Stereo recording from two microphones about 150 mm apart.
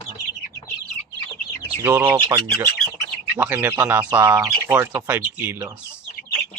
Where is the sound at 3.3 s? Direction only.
10° right (ahead or behind).